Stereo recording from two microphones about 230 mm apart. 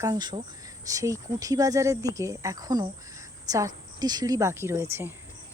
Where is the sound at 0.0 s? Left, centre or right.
Centre.